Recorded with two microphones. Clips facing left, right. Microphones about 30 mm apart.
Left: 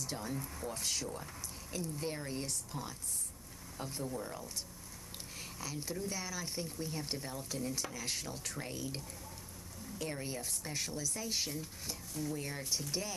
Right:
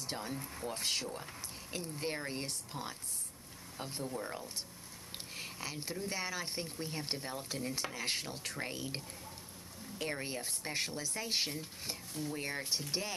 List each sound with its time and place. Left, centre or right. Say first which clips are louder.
0.0 s speech: even; right
1.1 s a sound: even; right
1.8 s speech: right 1 dB; right